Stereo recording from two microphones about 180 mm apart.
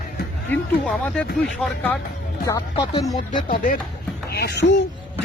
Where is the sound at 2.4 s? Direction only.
25° left (ahead or behind).